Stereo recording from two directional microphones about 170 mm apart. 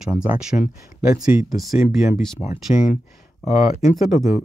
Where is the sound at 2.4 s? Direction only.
15° left (ahead or behind).